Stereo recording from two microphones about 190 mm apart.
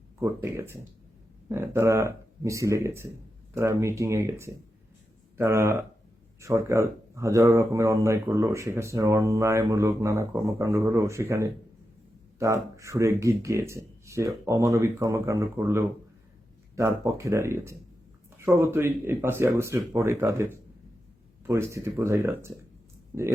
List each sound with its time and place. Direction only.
0.2 s speech: 15° right (ahead or behind)